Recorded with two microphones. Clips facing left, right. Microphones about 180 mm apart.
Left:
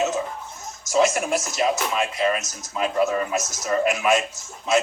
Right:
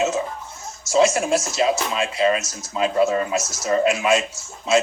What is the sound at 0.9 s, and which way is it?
Music, 30° right (ahead or behind).